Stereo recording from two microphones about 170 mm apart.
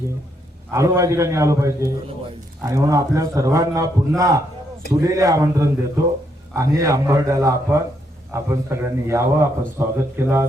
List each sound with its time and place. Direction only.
0.7 s a man's voice: 15° right (ahead or behind)